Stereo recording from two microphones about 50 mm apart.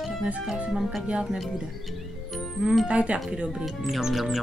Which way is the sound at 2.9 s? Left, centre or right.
Right.